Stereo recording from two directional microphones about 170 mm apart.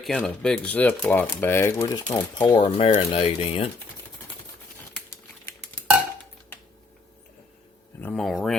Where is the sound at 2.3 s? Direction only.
30° left (ahead or behind).